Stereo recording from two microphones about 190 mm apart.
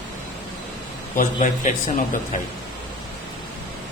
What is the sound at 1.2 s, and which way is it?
Speech, 45° left (ahead or behind).